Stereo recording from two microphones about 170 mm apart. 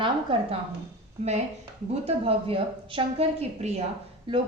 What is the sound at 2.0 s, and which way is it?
A woman's voice, 35° right (ahead or behind).